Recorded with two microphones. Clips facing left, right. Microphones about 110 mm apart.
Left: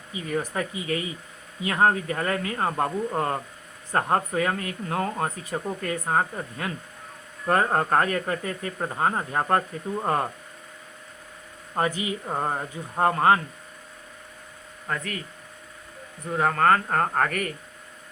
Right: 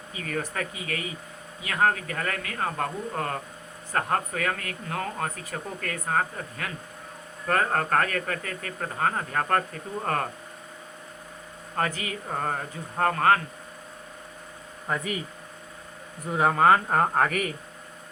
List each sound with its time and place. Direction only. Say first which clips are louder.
0.1 s speech: left 3 dB; 20° left (ahead or behind)
11.8 s speech: left 3 dB; 20° left (ahead or behind)
14.8 s speech: right 2 dB; 10° right (ahead or behind)
16.3 s speech: right 1 dB; 10° right (ahead or behind)